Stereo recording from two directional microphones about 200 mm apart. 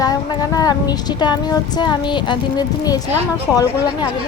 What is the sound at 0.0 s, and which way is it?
Child singing, 20° left (ahead or behind).